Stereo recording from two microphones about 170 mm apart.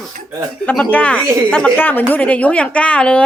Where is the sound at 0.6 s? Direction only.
10° left (ahead or behind).